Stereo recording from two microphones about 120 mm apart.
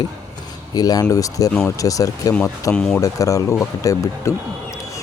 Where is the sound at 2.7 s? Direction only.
5° left (ahead or behind).